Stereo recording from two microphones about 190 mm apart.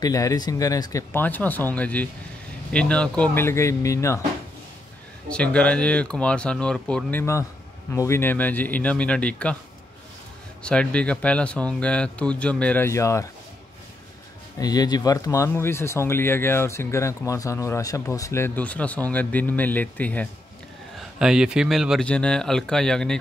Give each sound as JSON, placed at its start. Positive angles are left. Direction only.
{"t": 0.0, "sound": "speech", "side_deg": 20}
{"t": 5.3, "sound": "speech", "side_deg": 5}
{"t": 10.6, "sound": "speech", "side_deg": 5}
{"t": 14.6, "sound": "speech", "side_deg": 20}
{"t": 21.2, "sound": "speech", "side_deg": -5}